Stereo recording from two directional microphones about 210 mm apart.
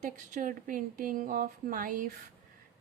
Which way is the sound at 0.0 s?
40° right (ahead or behind).